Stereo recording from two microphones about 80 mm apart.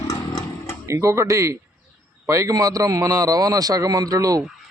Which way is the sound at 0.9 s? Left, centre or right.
Right.